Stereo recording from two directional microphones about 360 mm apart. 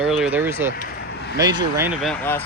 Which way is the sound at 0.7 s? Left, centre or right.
Left.